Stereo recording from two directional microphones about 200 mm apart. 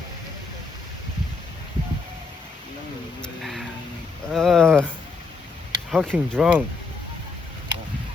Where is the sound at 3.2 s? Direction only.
Centre (ahead or behind).